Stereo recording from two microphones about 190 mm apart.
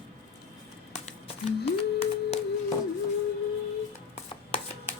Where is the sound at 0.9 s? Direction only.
35° left (ahead or behind).